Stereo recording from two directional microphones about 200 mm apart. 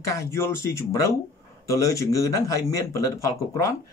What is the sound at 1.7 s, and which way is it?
Speech, 15° left (ahead or behind).